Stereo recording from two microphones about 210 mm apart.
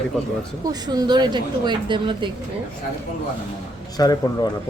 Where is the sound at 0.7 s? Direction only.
20° right (ahead or behind).